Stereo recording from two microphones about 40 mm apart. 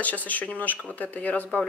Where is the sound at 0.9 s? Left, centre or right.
Left.